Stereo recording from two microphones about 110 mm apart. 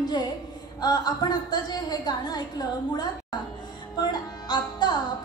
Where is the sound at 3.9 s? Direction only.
40° left (ahead or behind).